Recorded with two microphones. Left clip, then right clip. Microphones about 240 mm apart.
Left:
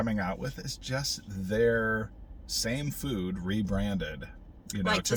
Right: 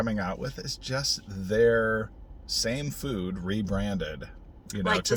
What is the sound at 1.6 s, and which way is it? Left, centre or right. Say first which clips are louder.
Speech: right 4 dB; centre.